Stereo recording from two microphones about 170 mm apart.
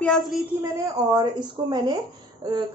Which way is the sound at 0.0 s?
5° left (ahead or behind).